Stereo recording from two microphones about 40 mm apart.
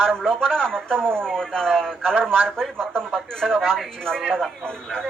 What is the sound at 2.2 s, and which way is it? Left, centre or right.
Speech, right.